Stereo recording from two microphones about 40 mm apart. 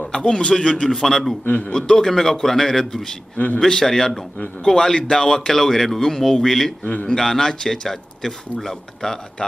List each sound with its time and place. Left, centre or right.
0.0 s a man's voice: centre
0.8 s a man's voice: centre
6.8 s a man's voice: left
7.1 s speech: centre